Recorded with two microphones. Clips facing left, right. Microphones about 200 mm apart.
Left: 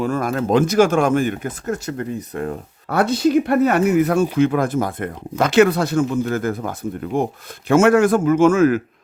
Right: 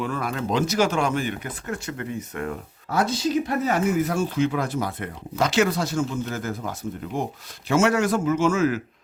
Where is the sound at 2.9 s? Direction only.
60° left (ahead or behind).